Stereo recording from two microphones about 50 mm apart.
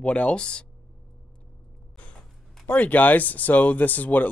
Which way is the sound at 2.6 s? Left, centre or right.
Left.